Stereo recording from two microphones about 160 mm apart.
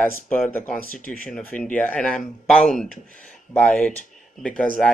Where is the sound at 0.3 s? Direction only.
10° left (ahead or behind).